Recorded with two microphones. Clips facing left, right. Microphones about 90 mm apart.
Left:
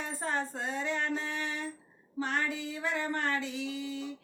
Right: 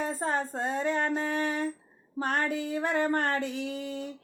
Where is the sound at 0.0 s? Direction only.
35° right (ahead or behind).